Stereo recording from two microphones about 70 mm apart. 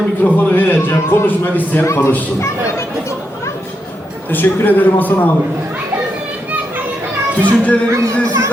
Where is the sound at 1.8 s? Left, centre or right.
Left.